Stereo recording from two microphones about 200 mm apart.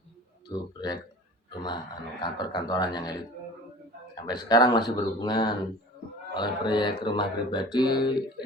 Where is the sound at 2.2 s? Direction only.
20° left (ahead or behind).